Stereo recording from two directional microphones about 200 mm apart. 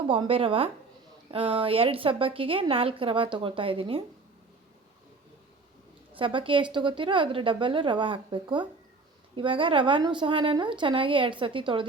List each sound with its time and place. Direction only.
0.1 s a woman's voice: 25° right (ahead or behind)
6.1 s a woman's voice: 25° right (ahead or behind)